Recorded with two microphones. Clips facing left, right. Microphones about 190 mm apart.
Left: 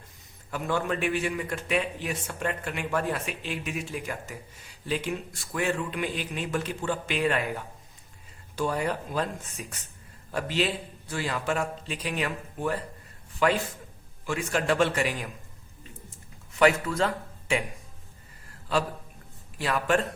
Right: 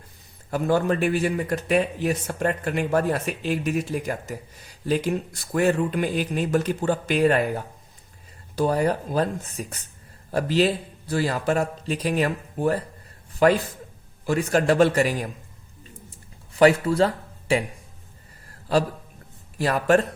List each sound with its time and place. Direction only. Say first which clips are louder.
0.5 s a man's voice: right 7 dB; 40° right (ahead or behind)
16.6 s a man's voice: right 5 dB; 35° right (ahead or behind)
19.5 s a man's voice: right 6 dB; 40° right (ahead or behind)